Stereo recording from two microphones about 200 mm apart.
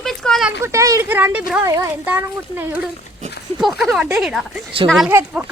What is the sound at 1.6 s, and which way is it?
Speech, 15° right (ahead or behind).